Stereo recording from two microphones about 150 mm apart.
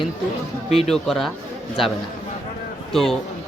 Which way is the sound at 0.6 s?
45° left (ahead or behind).